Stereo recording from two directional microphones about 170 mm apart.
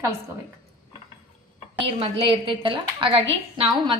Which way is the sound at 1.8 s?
30° right (ahead or behind).